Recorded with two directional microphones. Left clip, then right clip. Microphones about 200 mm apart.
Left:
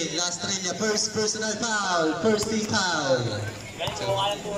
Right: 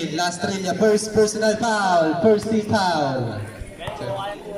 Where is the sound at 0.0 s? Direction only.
30° right (ahead or behind).